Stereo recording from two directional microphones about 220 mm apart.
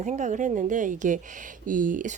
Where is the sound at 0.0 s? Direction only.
35° right (ahead or behind).